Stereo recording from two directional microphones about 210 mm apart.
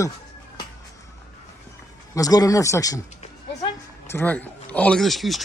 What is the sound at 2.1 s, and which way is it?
Speech, 15° left (ahead or behind).